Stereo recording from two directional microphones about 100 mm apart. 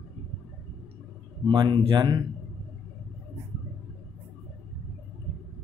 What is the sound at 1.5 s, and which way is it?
Speech, 50° right (ahead or behind).